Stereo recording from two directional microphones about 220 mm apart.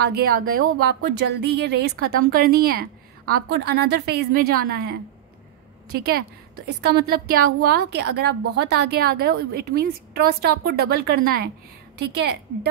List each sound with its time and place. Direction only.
0.0 s speech: 40° right (ahead or behind)